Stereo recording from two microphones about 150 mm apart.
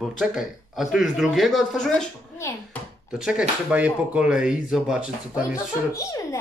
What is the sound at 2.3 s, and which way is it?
Speech, 20° left (ahead or behind).